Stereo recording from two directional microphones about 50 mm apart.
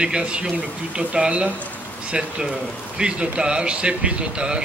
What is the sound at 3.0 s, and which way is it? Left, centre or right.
Speech, centre.